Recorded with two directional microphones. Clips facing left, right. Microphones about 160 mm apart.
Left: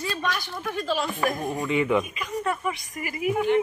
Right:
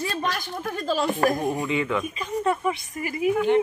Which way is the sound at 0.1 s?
45° right (ahead or behind).